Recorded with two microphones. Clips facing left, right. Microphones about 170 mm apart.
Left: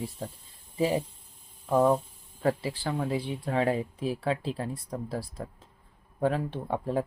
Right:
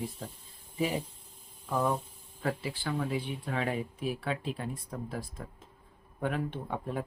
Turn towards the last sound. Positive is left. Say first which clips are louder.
# left 6 dB
turn(degrees=30)  # may be behind; listen again after turning